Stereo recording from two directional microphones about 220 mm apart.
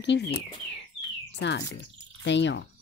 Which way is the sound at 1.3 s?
50° left (ahead or behind).